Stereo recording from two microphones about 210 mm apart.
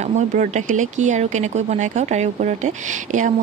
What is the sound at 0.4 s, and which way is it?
Speech, 35° right (ahead or behind).